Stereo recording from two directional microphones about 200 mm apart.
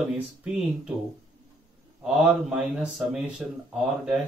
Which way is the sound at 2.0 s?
5° right (ahead or behind).